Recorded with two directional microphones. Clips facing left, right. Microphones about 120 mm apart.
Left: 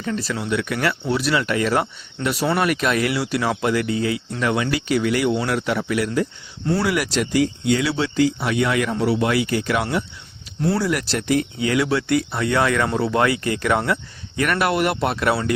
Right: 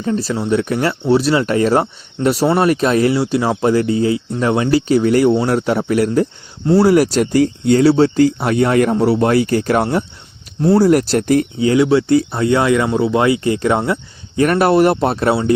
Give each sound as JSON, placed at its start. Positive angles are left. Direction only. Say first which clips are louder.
{"t": 0.0, "sound": "speech", "louder": "right 6 dB", "side_deg": -30}
{"t": 11.6, "sound": "speech", "louder": "right 8 dB", "side_deg": -25}